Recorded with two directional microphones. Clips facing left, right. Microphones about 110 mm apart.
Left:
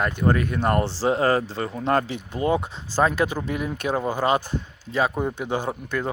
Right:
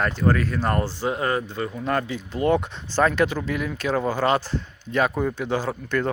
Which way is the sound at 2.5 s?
15° left (ahead or behind).